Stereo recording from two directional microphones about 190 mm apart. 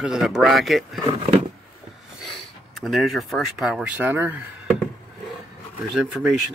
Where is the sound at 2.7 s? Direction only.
Centre (ahead or behind).